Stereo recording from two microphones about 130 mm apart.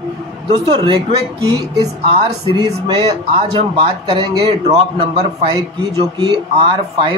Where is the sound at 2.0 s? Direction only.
45° right (ahead or behind).